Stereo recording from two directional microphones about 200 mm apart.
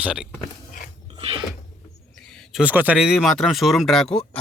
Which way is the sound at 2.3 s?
Centre (ahead or behind).